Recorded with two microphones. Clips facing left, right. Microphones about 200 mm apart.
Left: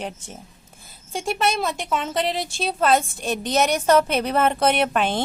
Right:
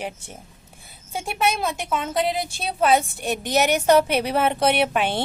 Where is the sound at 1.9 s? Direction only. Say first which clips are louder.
Right 2 dB; 5° right (ahead or behind).